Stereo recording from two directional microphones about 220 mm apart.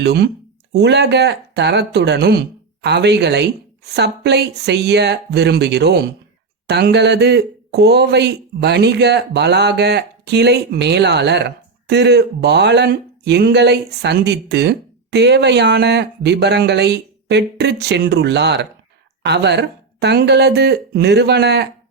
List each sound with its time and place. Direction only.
0.0 s a man's voice: 50° right (ahead or behind)